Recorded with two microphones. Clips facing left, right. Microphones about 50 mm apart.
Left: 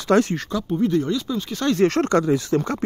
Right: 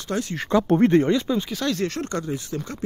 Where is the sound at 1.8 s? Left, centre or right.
Left.